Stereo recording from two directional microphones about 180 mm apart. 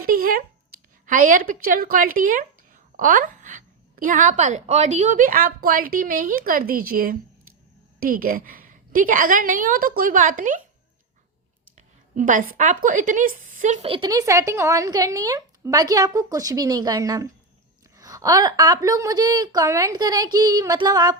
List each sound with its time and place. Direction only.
0.0 s a sound: 55° right (ahead or behind)
1.0 s speech: 50° right (ahead or behind)
12.1 s a woman's voice: 45° right (ahead or behind); by 21.2 s 20° right (ahead or behind)